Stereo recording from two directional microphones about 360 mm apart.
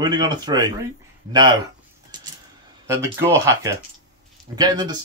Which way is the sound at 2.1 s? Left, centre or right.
Centre.